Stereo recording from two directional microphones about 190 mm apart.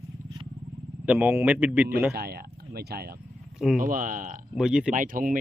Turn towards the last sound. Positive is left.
turn(degrees=-45)  # may be behind; listen again after turning